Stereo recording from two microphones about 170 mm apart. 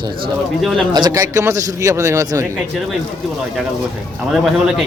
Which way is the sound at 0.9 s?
25° right (ahead or behind).